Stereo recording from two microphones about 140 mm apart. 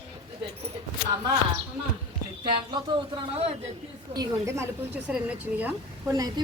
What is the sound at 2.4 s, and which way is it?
Speech, 35° right (ahead or behind).